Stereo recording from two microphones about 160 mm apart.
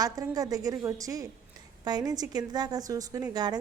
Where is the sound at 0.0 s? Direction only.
25° right (ahead or behind).